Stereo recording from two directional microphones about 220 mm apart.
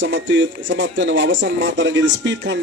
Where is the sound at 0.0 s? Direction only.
55° right (ahead or behind).